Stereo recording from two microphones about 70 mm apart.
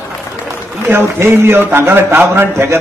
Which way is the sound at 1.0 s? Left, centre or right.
Right.